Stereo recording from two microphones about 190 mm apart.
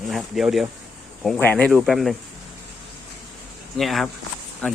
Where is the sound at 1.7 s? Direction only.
Centre (ahead or behind).